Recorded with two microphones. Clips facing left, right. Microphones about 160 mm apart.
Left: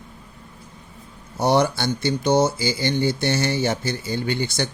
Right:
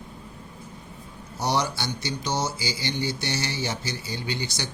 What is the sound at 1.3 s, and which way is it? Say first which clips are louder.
Speech: left 7 dB; 55° left (ahead or behind).